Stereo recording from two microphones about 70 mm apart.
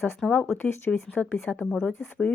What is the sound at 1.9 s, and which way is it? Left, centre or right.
Speech, left.